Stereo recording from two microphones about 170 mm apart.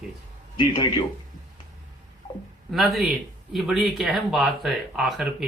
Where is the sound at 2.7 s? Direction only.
Centre (ahead or behind).